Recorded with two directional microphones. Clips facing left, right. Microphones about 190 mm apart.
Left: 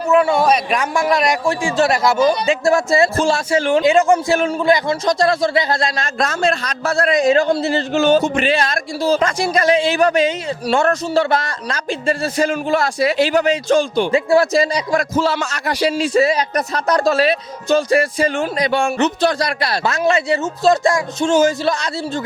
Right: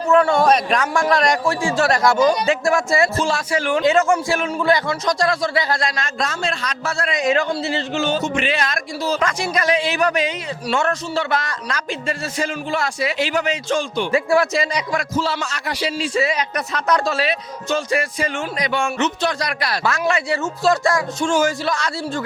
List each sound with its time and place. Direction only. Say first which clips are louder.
0.1 s a man's voice: left 1 dB; 5° left (ahead or behind)
1.5 s a man's voice: left 2 dB; 20° left (ahead or behind)
1.9 s a man's voice: left 1 dB; 10° left (ahead or behind)
2.6 s speech: left 6 dB; 30° left (ahead or behind)
3.8 s a man's voice: left 1 dB; 15° left (ahead or behind)
4.4 s speech: left 3 dB; 30° left (ahead or behind)
6.1 s speech: left 9 dB; 45° left (ahead or behind)
7.5 s speech: left 5 dB; 45° left (ahead or behind); by 12.5 s 30° left (ahead or behind)
12.5 s speech: left 6 dB; 40° left (ahead or behind)
15.1 s speech: left 4 dB; 50° left (ahead or behind); by 22.2 s 25° left (ahead or behind)